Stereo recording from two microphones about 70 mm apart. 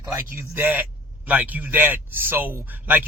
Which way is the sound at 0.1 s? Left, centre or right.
Right.